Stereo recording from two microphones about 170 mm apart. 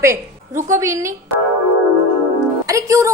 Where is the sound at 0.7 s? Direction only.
20° right (ahead or behind).